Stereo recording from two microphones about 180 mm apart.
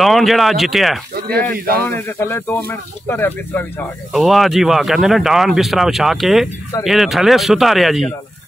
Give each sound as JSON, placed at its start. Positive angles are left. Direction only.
{"t": 0.0, "sound": "speech", "side_deg": 0}
{"t": 1.1, "sound": "speech", "side_deg": -60}
{"t": 1.9, "sound": "speech", "side_deg": 15}
{"t": 4.1, "sound": "speech", "side_deg": 0}